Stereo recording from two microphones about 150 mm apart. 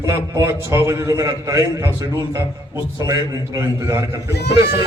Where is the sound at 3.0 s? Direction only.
20° right (ahead or behind).